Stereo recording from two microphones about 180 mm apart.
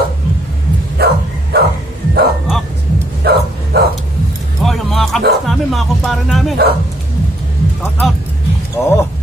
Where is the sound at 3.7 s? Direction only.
65° right (ahead or behind).